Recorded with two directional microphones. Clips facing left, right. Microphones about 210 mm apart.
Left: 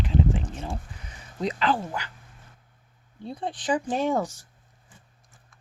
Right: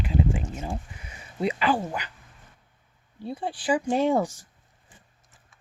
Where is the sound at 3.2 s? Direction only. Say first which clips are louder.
Right 1 dB; 5° right (ahead or behind).